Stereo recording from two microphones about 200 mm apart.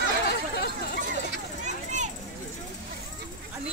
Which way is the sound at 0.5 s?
55° left (ahead or behind).